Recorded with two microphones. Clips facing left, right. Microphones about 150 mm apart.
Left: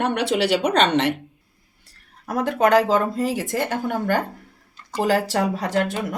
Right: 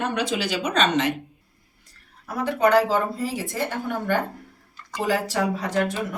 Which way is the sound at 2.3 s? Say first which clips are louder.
Left 2 dB; 90° left.